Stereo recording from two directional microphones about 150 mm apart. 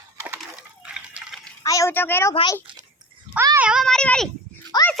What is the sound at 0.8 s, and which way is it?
Water, 5° right (ahead or behind).